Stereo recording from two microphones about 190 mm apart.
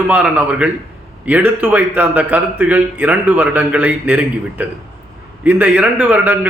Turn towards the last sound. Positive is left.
turn(degrees=-10)  # may be behind; listen again after turning